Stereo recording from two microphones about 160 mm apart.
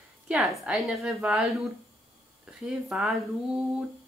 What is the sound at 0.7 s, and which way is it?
Speech, 5° right (ahead or behind).